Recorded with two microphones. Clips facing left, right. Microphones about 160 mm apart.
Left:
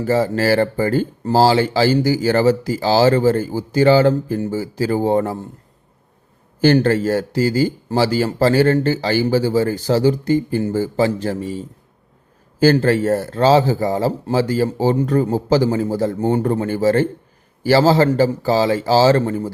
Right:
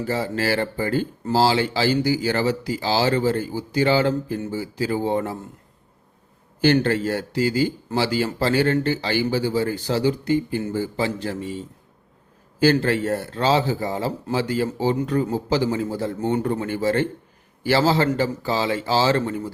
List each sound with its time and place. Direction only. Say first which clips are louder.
0.0 s speech: left 7 dB; 45° left (ahead or behind)
6.6 s speech: left 4 dB; 40° left (ahead or behind)